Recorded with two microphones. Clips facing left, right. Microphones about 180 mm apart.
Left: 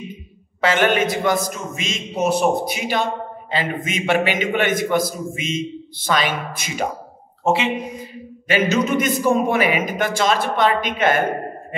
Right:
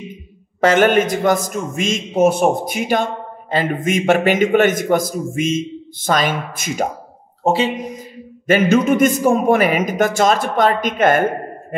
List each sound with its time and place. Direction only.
0.6 s a man's voice: 45° right (ahead or behind)
7.4 s speech: 35° right (ahead or behind)
8.5 s a man's voice: 50° right (ahead or behind)